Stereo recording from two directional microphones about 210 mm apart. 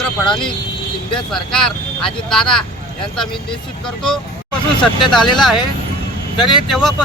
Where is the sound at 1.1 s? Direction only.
5° left (ahead or behind).